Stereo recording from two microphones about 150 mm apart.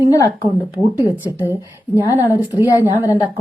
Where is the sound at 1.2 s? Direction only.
15° right (ahead or behind).